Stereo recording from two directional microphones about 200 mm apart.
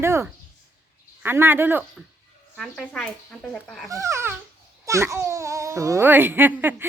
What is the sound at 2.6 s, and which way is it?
Speech, 5° left (ahead or behind).